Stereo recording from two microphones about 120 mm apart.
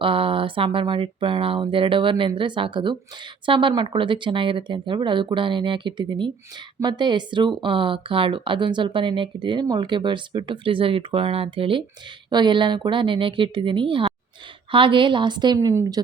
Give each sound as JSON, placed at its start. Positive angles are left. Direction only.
{"t": 0.0, "sound": "speech", "side_deg": -50}
{"t": 15.5, "sound": "a woman's voice", "side_deg": -25}